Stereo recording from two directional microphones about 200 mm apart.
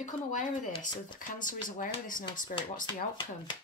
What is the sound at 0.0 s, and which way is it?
Speech, 40° left (ahead or behind).